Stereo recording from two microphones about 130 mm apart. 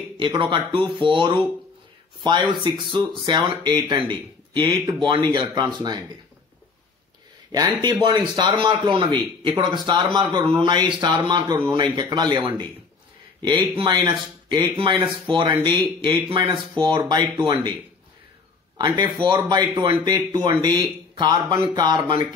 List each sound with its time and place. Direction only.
0.2 s speech: 40° right (ahead or behind)
7.8 s speech: 35° right (ahead or behind)
18.8 s speech: 35° right (ahead or behind)